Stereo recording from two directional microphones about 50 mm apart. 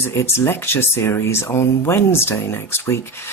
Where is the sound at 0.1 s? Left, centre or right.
Left.